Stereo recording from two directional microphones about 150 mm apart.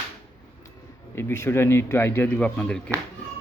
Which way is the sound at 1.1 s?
15° left (ahead or behind).